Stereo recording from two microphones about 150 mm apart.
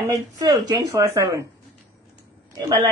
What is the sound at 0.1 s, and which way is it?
Speech, 25° right (ahead or behind).